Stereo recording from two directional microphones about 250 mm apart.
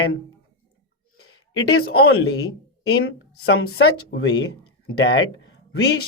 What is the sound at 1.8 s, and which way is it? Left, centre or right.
Speech, left.